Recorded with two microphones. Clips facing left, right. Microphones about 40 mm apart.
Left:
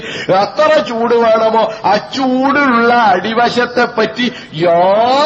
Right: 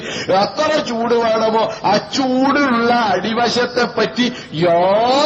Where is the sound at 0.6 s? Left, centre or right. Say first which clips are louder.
Left 6 dB; left.